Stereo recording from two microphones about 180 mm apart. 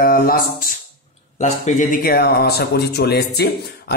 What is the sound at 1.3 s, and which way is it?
Speech, 40° left (ahead or behind).